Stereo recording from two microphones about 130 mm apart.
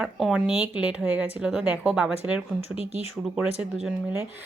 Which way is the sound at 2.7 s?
50° left (ahead or behind).